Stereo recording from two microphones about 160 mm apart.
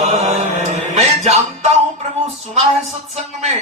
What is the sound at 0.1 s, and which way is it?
Music, 45° right (ahead or behind).